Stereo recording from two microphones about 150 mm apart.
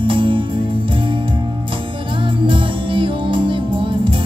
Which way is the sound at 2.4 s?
35° right (ahead or behind).